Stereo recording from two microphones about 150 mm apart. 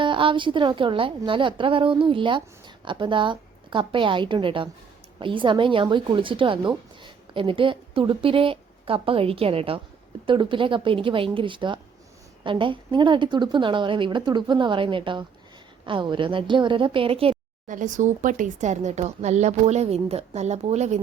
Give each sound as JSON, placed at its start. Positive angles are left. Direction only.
{"t": 0.0, "sound": "a woman's voice", "side_deg": -35}
{"t": 17.7, "sound": "speech", "side_deg": -60}